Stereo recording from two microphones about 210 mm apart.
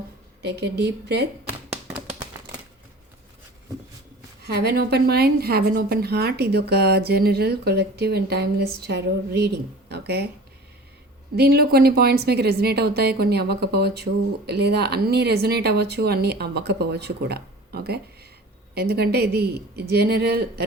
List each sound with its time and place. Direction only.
0.4 s a woman's voice: 50° right (ahead or behind)
4.4 s a woman's voice: 50° right (ahead or behind)
9.9 s a sound: 50° right (ahead or behind)
11.3 s a woman's voice: 50° right (ahead or behind)